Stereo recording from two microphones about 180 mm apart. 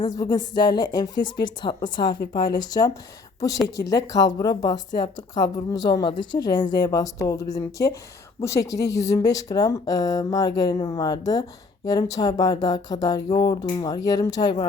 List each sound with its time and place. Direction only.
0.0 s a woman's voice: 20° left (ahead or behind)